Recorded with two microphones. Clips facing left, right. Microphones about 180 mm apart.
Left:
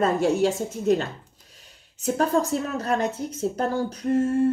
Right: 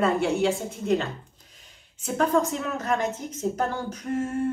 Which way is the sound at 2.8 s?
35° left (ahead or behind).